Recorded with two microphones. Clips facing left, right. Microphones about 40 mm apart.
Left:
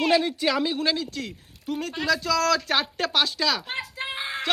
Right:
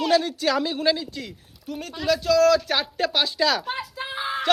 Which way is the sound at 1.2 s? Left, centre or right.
Left.